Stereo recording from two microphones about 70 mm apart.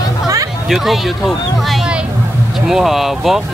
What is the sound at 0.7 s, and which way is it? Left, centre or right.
Speech, centre.